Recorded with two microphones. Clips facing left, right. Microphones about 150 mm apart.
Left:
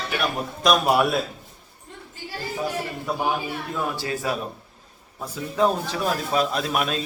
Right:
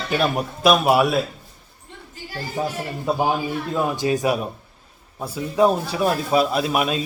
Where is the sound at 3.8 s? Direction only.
20° right (ahead or behind).